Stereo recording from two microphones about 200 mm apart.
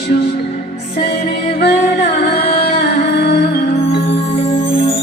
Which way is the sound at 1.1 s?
50° left (ahead or behind).